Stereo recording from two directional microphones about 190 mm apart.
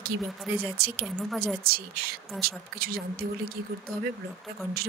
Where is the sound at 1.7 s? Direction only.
55° right (ahead or behind).